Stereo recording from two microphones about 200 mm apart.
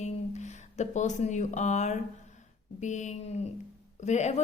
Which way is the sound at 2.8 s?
35° left (ahead or behind).